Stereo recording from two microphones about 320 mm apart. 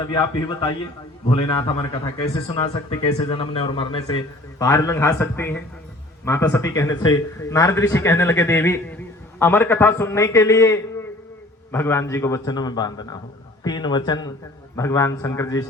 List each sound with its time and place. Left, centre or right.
0.0 s speech: centre